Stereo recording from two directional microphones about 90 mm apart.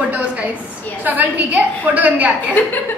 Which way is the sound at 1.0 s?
20° right (ahead or behind).